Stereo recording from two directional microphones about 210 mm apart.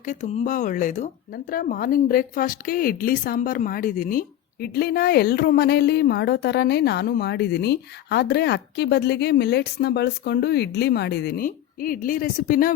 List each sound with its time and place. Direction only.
0.0 s speech: 35° left (ahead or behind)